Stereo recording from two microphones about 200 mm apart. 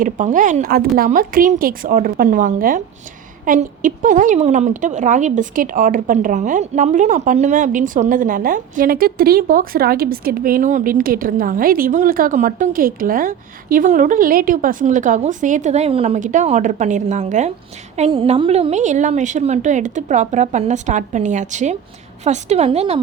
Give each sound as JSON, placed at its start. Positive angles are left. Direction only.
{"t": 0.0, "sound": "a woman's voice", "side_deg": -40}